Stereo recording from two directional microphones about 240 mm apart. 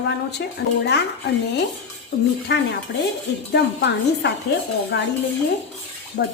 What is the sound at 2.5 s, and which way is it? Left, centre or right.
A woman's voice, left.